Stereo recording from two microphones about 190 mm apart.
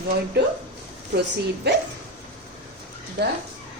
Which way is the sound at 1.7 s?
60° right (ahead or behind).